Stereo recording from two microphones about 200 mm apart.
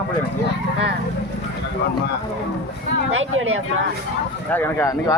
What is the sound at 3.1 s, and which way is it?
Speech, 80° right.